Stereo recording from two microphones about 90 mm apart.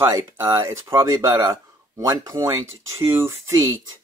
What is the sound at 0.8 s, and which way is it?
Speech, 35° right (ahead or behind).